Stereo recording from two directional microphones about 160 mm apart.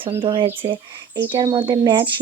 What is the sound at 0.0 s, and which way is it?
Speech, 35° right (ahead or behind).